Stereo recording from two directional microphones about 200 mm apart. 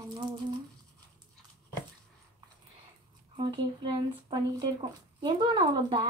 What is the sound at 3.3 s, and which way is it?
Speech, 25° right (ahead or behind).